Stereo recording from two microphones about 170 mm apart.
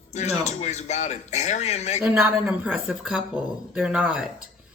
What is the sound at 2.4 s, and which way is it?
Speech, centre (ahead or behind).